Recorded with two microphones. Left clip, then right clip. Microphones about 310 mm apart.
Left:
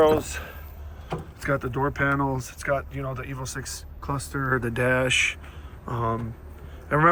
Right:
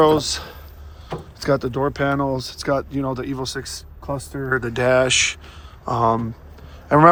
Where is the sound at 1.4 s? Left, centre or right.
Centre.